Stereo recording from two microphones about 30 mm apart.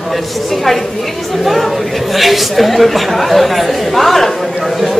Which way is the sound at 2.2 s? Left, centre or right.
Centre.